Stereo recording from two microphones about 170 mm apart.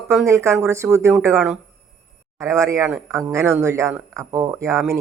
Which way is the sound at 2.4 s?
15° right (ahead or behind).